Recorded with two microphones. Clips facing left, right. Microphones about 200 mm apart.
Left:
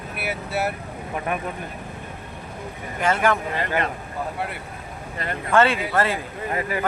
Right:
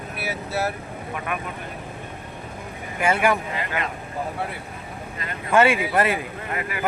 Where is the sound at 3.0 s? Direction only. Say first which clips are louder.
Even; 10° right (ahead or behind).